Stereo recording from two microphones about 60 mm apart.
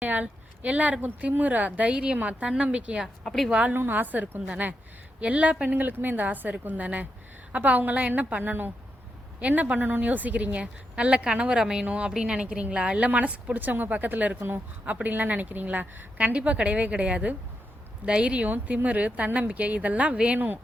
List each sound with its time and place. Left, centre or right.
0.0 s a sound: right
1.0 s a woman's voice: right
3.0 s speech: centre
3.5 s a woman's voice: right
9.4 s a woman's voice: right
11.9 s a woman's voice: right
14.3 s speech: right
14.8 s a woman's voice: right
18.4 s a woman's voice: right